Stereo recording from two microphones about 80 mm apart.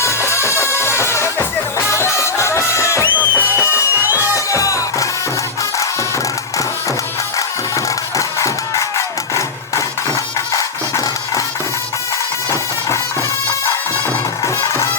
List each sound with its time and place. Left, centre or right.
0.0 s music: left
3.1 s music: right
3.4 s music: left
7.3 s music: left
14.4 s music: left